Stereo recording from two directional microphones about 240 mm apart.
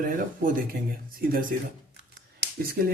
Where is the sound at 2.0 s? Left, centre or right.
Right.